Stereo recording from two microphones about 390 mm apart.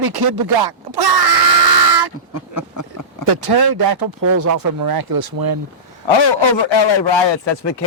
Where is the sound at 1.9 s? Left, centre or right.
Right.